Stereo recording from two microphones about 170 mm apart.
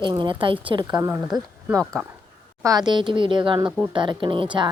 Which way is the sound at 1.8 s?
5° left (ahead or behind).